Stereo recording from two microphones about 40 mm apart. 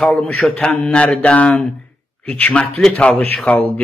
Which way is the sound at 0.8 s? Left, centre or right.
Left.